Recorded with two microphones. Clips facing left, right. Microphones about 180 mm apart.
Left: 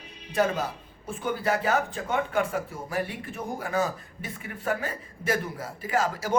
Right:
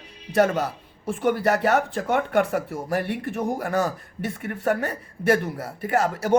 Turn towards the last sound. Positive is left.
turn(degrees=-65)  # may be behind; listen again after turning